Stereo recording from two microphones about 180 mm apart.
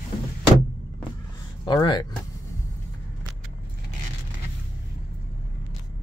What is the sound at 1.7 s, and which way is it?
Speech, 25° left (ahead or behind).